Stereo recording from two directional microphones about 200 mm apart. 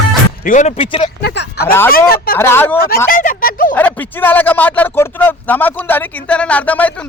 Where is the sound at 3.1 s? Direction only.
45° left (ahead or behind).